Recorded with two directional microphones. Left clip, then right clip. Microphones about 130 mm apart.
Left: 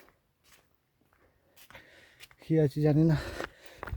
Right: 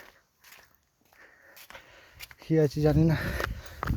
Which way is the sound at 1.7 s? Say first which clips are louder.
Left 1 dB; 40° left (ahead or behind).